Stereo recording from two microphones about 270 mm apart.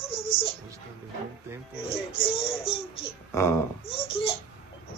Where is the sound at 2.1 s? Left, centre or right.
Left.